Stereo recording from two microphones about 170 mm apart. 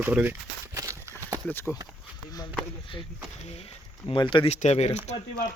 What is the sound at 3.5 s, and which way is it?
Speech, 35° left (ahead or behind).